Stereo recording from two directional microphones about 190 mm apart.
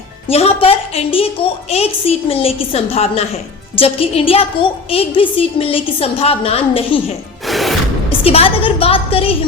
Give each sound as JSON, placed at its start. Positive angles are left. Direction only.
{"t": 0.3, "sound": "a woman's voice", "side_deg": 30}
{"t": 7.4, "sound": "music", "side_deg": 0}
{"t": 8.2, "sound": "a woman's voice", "side_deg": 30}